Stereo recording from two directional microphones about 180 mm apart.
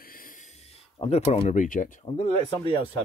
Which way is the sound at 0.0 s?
50° left (ahead or behind).